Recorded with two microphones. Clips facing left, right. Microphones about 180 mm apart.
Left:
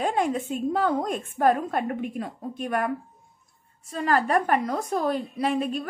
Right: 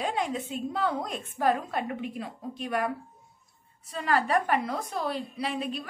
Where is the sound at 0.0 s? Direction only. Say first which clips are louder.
Left 5 dB; 50° left (ahead or behind).